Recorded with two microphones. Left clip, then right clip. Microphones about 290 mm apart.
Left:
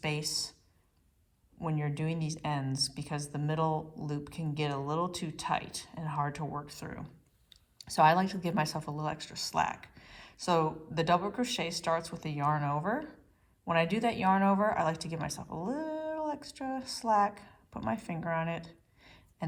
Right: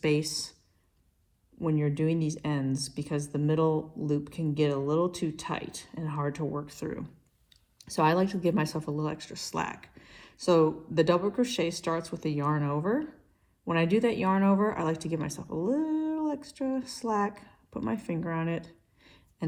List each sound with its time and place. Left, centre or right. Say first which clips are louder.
0.0 s speech: right 6 dB; centre
1.5 s speech: right 7 dB; centre
18.9 s a sound: right 1 dB; centre